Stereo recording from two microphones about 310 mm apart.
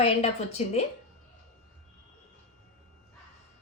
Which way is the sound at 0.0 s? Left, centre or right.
Left.